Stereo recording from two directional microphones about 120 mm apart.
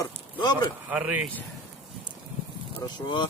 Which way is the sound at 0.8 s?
10° right (ahead or behind).